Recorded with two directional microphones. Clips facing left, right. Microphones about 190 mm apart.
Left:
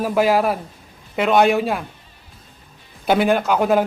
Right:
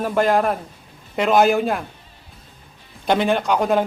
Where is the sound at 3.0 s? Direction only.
5° left (ahead or behind).